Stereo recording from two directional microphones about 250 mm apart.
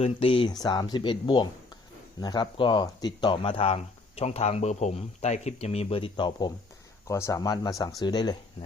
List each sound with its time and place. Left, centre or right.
0.0 s speech: left